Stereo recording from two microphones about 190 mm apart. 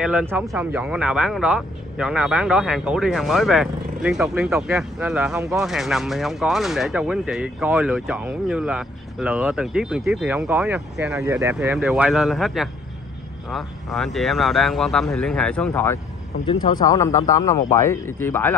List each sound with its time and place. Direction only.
0.0 s speech: 10° right (ahead or behind); by 16.0 s 10° left (ahead or behind)
16.4 s speech: 25° left (ahead or behind)